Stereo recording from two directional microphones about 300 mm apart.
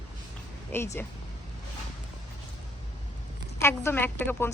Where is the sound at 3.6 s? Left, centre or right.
Centre.